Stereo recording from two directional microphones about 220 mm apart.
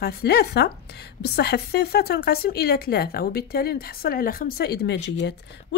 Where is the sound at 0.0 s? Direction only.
45° left (ahead or behind).